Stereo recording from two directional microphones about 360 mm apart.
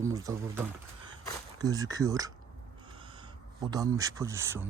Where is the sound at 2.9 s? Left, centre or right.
Centre.